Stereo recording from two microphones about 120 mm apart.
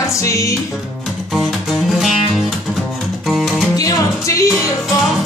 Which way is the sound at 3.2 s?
Centre (ahead or behind).